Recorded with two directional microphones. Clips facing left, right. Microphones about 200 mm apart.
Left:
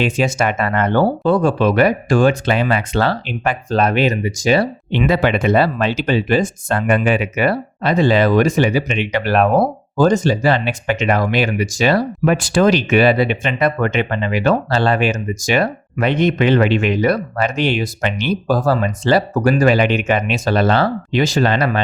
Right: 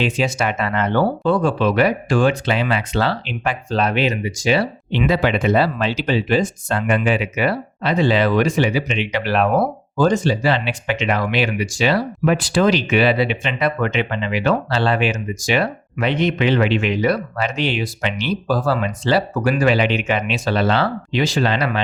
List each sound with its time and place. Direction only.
0.0 s speech: 50° left (ahead or behind)